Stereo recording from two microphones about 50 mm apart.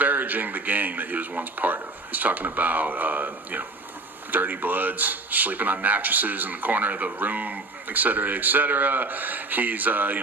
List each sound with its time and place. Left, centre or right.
0.0 s a man's voice: right